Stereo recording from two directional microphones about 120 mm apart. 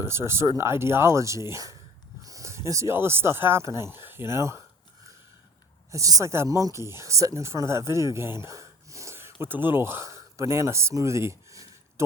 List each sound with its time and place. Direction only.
0.0 s speech: 20° right (ahead or behind)
5.9 s speech: 30° right (ahead or behind)